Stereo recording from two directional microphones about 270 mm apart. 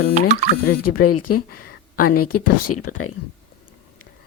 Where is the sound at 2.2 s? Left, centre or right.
Left.